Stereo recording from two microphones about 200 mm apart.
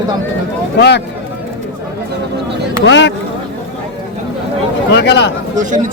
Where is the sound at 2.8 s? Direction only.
65° left (ahead or behind).